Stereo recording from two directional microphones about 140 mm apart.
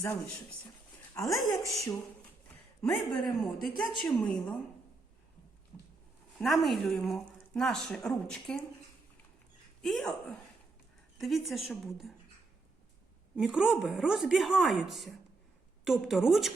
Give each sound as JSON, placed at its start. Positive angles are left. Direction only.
{"t": 1.1, "sound": "speech", "side_deg": 25}
{"t": 1.4, "sound": "a woman's voice", "side_deg": 0}
{"t": 6.3, "sound": "a woman's voice", "side_deg": 0}
{"t": 9.8, "sound": "a woman's voice", "side_deg": 5}
{"t": 13.3, "sound": "a woman's voice", "side_deg": -5}